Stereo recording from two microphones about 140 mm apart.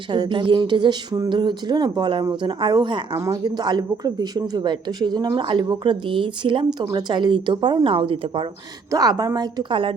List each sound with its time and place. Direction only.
0.1 s speech: 35° right (ahead or behind)
8.9 s speech: 30° right (ahead or behind)